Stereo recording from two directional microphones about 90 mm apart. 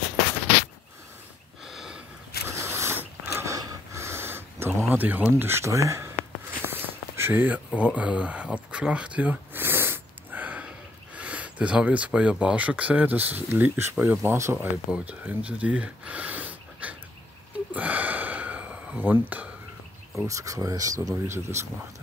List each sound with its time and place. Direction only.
1.7 s sniff: 5° right (ahead or behind)
2.4 s mechanisms: 30° right (ahead or behind)
3.5 s a sound: 35° right (ahead or behind); by 5.3 s 20° right (ahead or behind)
5.3 s speech: 30° right (ahead or behind)
6.6 s a sound: 25° right (ahead or behind)
11.1 s speech: 15° right (ahead or behind)
14.9 s speech: 15° right (ahead or behind)
17.7 s gasp: 15° right (ahead or behind)
20.2 s speech: 35° right (ahead or behind)